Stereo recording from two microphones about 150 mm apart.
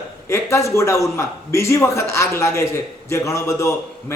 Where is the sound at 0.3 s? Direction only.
20° left (ahead or behind).